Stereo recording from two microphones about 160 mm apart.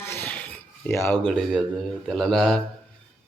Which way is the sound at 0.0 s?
15° left (ahead or behind).